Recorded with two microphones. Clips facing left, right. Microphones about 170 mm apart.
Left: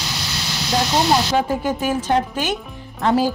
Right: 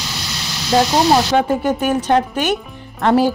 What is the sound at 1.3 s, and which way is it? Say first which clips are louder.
A woman's voice: right 4 dB; 65° right (ahead or behind).